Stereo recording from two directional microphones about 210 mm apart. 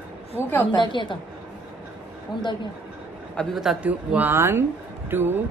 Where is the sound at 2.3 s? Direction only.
20° left (ahead or behind).